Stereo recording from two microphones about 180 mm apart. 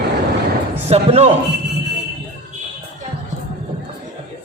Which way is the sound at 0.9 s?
35° right (ahead or behind).